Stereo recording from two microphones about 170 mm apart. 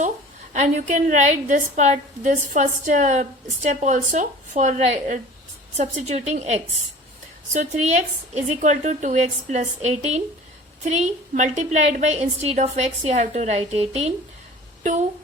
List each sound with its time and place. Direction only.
0.5 s a woman's voice: 45° right (ahead or behind)